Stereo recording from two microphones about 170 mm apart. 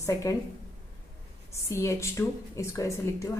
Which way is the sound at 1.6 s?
15° left (ahead or behind).